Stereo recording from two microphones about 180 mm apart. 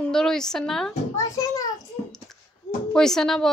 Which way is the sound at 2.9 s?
Centre (ahead or behind).